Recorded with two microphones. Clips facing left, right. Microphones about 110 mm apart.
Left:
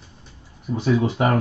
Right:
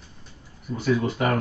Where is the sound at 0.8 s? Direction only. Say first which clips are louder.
Left 3 dB; 20° left (ahead or behind).